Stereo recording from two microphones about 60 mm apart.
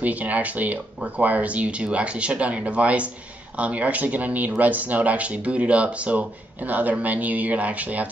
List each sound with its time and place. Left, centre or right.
0.0 s speech: right